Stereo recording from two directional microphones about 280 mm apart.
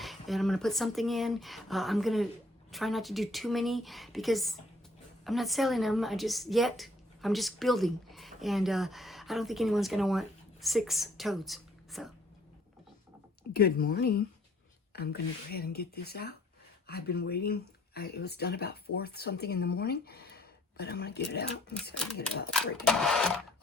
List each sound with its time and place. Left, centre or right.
0.0 s a woman's voice: centre
13.5 s speech: left
22.4 s speech: centre